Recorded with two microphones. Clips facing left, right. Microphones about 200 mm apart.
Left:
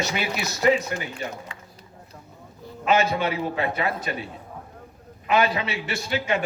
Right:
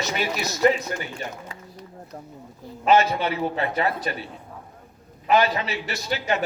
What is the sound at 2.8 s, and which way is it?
A man's voice, 35° right (ahead or behind).